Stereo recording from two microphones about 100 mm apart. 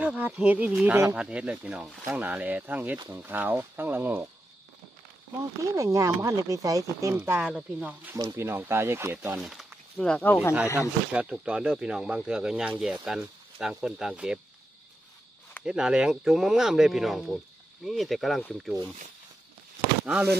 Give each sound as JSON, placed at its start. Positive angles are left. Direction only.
{"t": 0.0, "sound": "speech", "side_deg": -15}
{"t": 5.6, "sound": "speech", "side_deg": -30}
{"t": 7.4, "sound": "speech", "side_deg": -15}
{"t": 8.2, "sound": "speech", "side_deg": -30}
{"t": 9.4, "sound": "speech", "side_deg": 0}
{"t": 9.9, "sound": "speech", "side_deg": 10}
{"t": 10.8, "sound": "speech", "side_deg": -10}
{"t": 15.6, "sound": "speech", "side_deg": -5}